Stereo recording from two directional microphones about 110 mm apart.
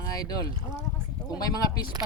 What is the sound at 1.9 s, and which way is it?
Speech, 35° right (ahead or behind).